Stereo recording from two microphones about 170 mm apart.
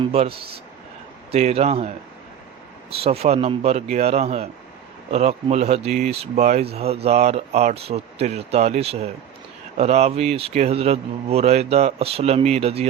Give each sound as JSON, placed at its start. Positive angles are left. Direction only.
{"t": 0.0, "sound": "a man's voice", "side_deg": -35}
{"t": 2.9, "sound": "a man's voice", "side_deg": -35}